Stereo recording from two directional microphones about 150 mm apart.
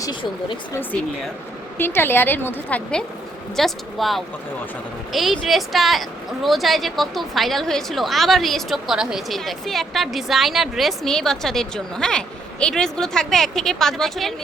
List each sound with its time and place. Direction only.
0.0 s speech: 30° left (ahead or behind)
0.7 s a woman's voice: 15° left (ahead or behind)